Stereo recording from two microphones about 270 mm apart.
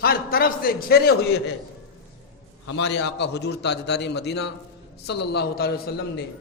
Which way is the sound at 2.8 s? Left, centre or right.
Left.